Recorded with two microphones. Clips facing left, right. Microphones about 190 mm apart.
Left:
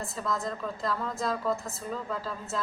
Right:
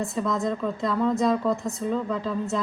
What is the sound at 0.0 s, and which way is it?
A woman's voice, centre (ahead or behind).